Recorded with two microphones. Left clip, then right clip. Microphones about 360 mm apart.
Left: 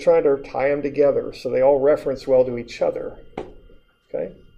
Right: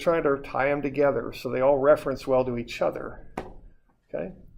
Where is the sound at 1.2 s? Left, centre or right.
Right.